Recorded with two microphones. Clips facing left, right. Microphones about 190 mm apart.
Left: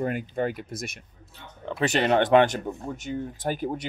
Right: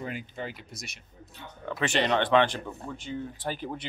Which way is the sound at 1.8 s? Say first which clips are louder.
Left 4 dB; 40° left (ahead or behind).